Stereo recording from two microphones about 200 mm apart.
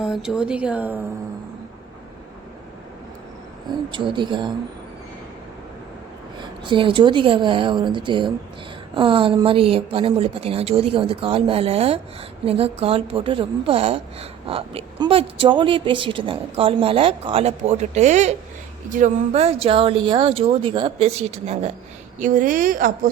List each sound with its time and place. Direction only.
0.0 s speech: centre (ahead or behind)
3.9 s speech: 25° right (ahead or behind)
6.4 s speech: 25° right (ahead or behind)
22.2 s a woman's voice: 40° right (ahead or behind)